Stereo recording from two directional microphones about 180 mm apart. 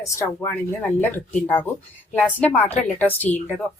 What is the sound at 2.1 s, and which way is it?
Speech, 10° left (ahead or behind).